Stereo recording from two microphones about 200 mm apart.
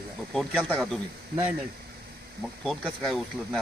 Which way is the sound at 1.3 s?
50° right (ahead or behind).